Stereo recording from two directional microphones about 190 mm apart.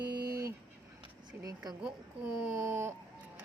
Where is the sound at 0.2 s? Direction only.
50° right (ahead or behind).